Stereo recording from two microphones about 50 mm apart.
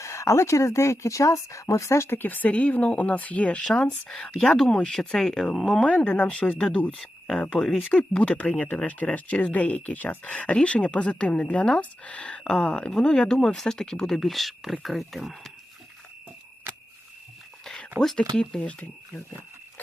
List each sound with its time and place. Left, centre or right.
0.0 s speech: left
2.1 s speech: left
2.5 s speech: left
3.7 s speech: centre
5.8 s speech: left
8.1 s speech: left
12.5 s speech: centre
18.2 s speech: centre